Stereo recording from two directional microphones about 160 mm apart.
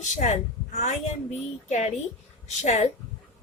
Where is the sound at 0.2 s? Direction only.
45° left (ahead or behind).